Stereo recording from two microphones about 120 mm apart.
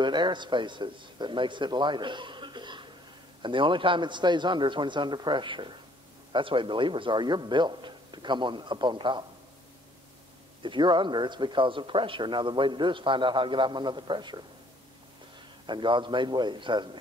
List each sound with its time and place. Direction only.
0.0 s a man's voice: 40° right (ahead or behind)
10.6 s a man's voice: 40° right (ahead or behind)
15.6 s a man's voice: 40° right (ahead or behind)